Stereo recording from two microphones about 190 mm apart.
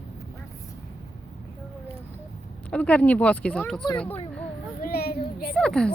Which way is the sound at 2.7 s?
5° left (ahead or behind).